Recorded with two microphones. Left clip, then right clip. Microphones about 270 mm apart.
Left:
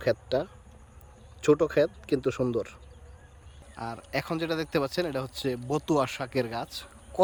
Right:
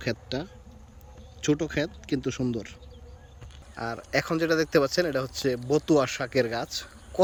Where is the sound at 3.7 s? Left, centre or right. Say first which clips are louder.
Right 5 dB; centre.